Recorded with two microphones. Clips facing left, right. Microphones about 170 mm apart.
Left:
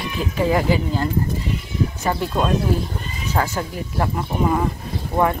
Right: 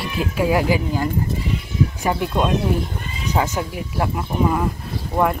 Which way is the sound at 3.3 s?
15° right (ahead or behind).